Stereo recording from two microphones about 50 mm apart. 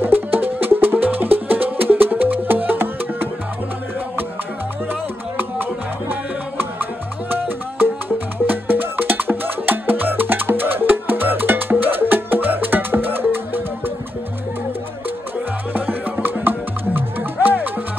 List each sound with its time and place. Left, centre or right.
0.0 s music: right
5.4 s music: right
15.7 s music: right